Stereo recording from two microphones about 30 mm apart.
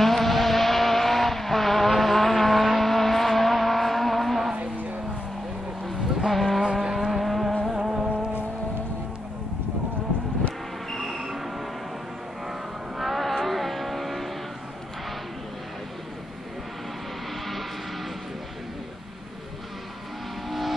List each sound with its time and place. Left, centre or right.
0.0 s vehicle: centre
5.9 s vehicle: centre
6.7 s vehicle: centre
7.0 s vehicle: centre
7.7 s a sound: right
11.0 s a sound: centre
12.4 s vehicle: centre
20.4 s vehicle: centre